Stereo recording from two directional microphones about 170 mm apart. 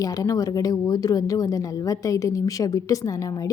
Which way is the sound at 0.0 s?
20° left (ahead or behind).